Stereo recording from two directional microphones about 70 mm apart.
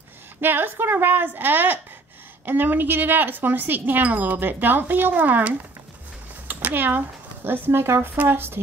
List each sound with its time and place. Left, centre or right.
0.4 s speech: right